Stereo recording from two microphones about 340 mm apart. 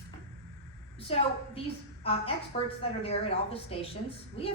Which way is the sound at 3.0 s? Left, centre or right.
Centre.